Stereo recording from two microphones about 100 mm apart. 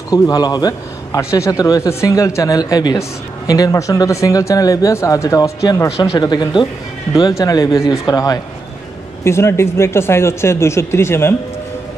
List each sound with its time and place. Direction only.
0.1 s a man's voice: 40° left (ahead or behind)
7.2 s a man's voice: 35° left (ahead or behind)